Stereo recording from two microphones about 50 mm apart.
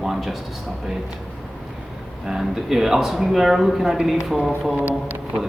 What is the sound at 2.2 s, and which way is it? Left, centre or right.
Speech, centre.